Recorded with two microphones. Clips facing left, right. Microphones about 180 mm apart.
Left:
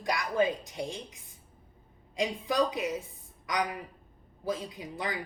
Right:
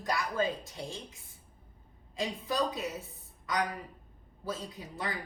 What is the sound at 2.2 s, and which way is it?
A woman's voice, 15° left (ahead or behind).